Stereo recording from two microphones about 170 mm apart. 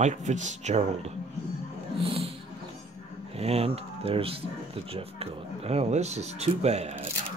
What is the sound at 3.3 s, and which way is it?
Speech, 35° right (ahead or behind).